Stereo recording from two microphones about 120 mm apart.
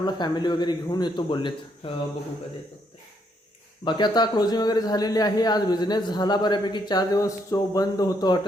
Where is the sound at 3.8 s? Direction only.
40° left (ahead or behind).